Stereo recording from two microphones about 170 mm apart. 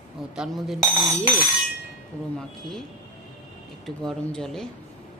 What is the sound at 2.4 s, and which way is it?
Speech, 5° left (ahead or behind).